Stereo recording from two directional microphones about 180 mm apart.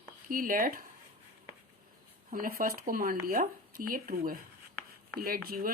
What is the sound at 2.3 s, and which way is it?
Speech, 50° right (ahead or behind).